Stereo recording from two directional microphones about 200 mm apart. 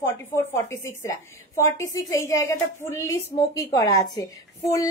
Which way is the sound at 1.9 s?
15° left (ahead or behind).